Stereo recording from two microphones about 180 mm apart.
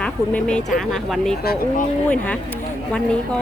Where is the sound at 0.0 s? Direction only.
5° left (ahead or behind).